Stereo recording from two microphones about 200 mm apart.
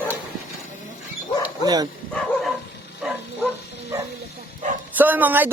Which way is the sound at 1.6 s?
20° right (ahead or behind).